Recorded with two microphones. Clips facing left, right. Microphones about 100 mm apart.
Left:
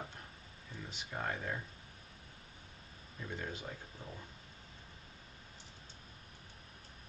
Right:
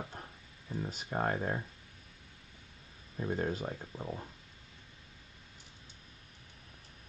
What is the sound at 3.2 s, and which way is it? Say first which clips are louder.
Speech: right 9 dB; 45° right (ahead or behind).